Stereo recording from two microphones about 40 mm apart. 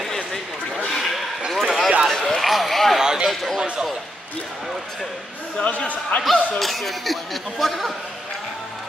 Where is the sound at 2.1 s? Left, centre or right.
Centre.